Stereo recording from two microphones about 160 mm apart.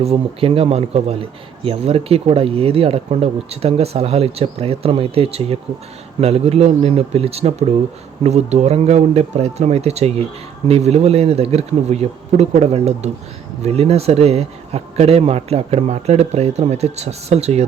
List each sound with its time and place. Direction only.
0.0 s a man's voice: 35° right (ahead or behind)